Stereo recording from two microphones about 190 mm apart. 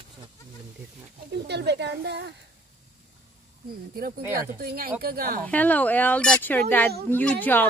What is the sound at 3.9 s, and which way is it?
Speech, 50° right (ahead or behind).